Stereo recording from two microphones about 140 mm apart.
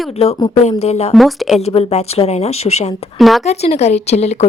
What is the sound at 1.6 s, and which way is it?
A woman's voice, 50° left (ahead or behind).